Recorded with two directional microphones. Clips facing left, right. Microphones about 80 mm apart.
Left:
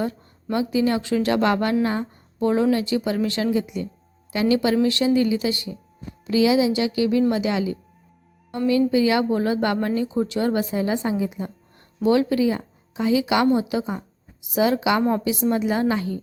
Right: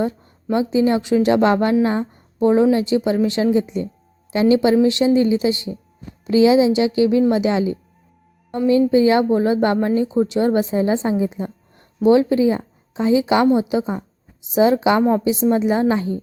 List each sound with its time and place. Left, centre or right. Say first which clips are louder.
0.5 s speech: right 4 dB; right
8.9 s speech: right 5 dB; right